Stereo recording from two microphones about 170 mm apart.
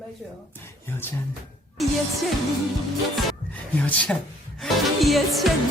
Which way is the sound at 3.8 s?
5° left (ahead or behind).